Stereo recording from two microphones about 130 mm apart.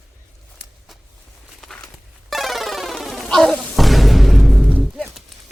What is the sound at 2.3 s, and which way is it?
Music, centre (ahead or behind).